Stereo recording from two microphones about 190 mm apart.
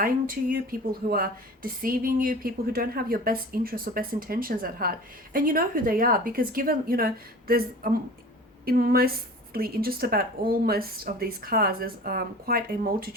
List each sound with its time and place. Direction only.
0.0 s speech: 50° right (ahead or behind)